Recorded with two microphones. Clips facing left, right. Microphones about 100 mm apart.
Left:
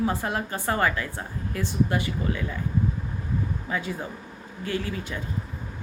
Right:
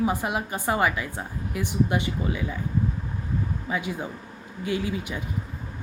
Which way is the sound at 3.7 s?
15° right (ahead or behind).